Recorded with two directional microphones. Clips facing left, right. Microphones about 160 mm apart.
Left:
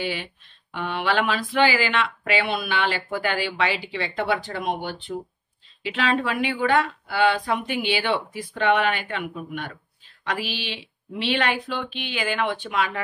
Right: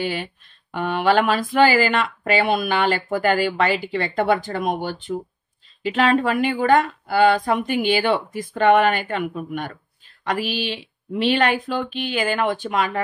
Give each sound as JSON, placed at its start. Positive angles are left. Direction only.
{"t": 0.0, "sound": "speech", "side_deg": -45}